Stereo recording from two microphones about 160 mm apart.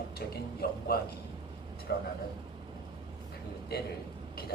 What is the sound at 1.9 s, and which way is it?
Speech, 90° left.